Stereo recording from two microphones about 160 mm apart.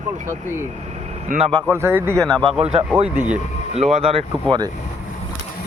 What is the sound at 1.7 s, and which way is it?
Speech, 15° right (ahead or behind).